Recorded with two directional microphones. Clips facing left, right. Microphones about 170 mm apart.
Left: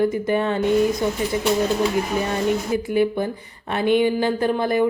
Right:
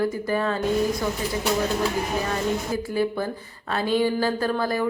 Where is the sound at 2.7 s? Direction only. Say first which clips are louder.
Left 5 dB; 20° left (ahead or behind).